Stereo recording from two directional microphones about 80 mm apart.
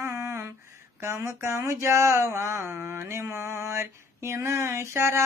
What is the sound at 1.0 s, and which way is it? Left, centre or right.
Mantra, right.